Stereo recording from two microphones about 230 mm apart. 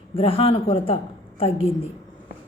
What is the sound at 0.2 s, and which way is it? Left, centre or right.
A woman's voice, left.